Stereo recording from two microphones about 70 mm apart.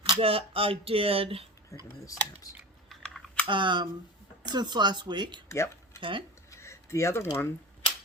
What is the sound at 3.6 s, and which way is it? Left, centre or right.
Speech, right.